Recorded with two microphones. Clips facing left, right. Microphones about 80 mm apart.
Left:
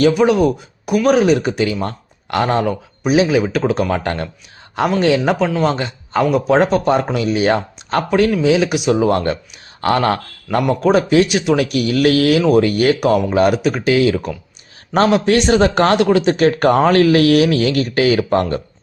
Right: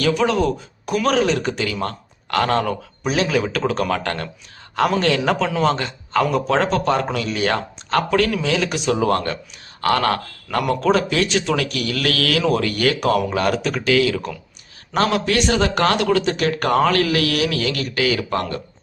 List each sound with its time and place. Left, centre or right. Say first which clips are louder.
0.1 s a man's voice: left 5 dB; centre; by 18.4 s left